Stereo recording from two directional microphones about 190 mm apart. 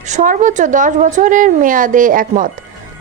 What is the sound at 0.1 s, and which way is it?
A woman's voice, 40° right (ahead or behind).